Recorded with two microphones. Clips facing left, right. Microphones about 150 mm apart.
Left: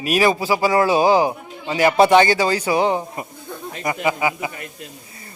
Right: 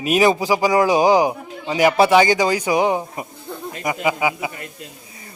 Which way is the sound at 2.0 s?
5° right (ahead or behind).